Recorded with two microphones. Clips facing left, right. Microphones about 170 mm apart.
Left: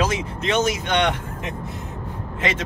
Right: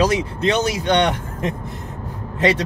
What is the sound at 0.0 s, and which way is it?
Speech, 35° right (ahead or behind).